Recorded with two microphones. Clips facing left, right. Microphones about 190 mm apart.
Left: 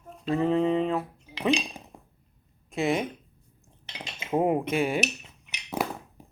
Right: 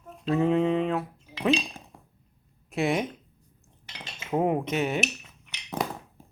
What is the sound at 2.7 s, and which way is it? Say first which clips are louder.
Speech: even; centre (ahead or behind).